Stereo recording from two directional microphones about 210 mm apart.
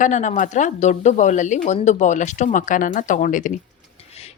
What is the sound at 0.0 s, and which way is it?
Speech, 35° left (ahead or behind).